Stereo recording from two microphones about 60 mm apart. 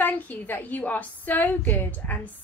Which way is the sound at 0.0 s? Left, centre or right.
Left.